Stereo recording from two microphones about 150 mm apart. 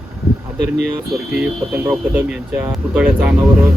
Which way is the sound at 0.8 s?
Centre (ahead or behind).